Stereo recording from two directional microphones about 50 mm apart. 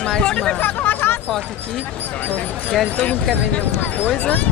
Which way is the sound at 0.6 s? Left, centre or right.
Left.